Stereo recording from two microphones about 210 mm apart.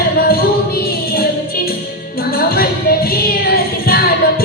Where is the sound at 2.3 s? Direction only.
45° left (ahead or behind).